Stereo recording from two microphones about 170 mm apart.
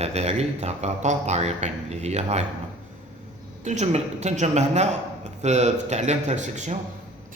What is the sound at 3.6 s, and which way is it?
Speech, 45° right (ahead or behind).